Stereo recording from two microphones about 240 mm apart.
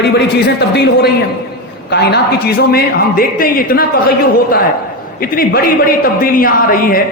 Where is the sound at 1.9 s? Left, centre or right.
Left.